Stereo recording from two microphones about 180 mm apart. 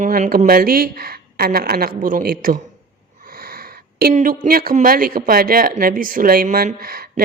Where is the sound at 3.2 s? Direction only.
55° right (ahead or behind).